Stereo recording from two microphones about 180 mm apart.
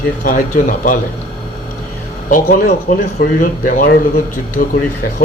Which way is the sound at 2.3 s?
50° left (ahead or behind).